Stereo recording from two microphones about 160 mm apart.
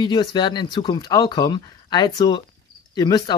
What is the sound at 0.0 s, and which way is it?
Speech, 25° left (ahead or behind).